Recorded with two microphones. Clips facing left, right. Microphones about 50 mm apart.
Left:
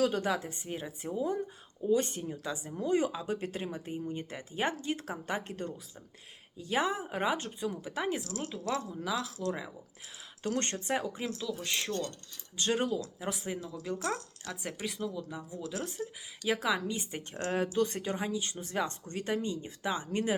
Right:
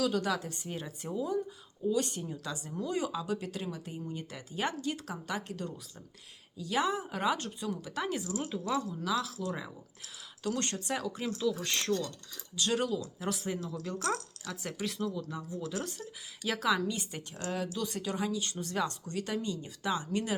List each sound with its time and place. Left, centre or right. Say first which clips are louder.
0.0 s a woman's voice: left 1 dB; left
1.1 s a woman's voice: even; left
8.2 s speech: right 2 dB; centre
9.0 s speech: left 2 dB; centre
10.4 s speech: left 1 dB; left
11.2 s speech: right 4 dB; centre
12.5 s a woman's voice: even; left